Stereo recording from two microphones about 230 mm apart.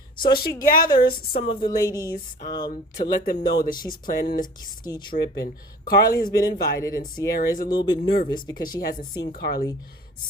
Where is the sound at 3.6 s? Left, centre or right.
Left.